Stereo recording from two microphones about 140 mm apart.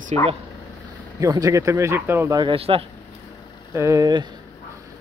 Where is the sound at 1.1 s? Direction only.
25° right (ahead or behind).